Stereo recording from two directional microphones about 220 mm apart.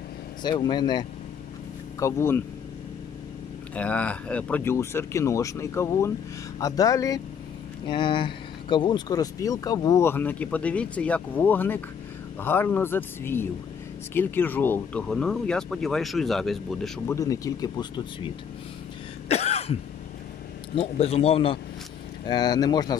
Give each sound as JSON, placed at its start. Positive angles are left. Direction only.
{"t": 0.4, "sound": "speech", "side_deg": 20}
{"t": 3.7, "sound": "speech", "side_deg": 5}
{"t": 17.1, "sound": "speech", "side_deg": 15}
{"t": 19.2, "sound": "throat clearing", "side_deg": 30}
{"t": 20.7, "sound": "speech", "side_deg": 25}